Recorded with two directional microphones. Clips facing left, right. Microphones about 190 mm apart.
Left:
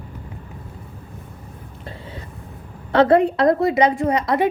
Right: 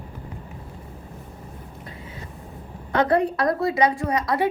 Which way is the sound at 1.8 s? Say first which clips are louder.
Left 8 dB; 30° left (ahead or behind).